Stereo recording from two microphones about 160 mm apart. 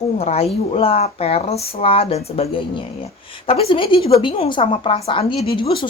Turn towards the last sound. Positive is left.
turn(degrees=30)  # may be behind; listen again after turning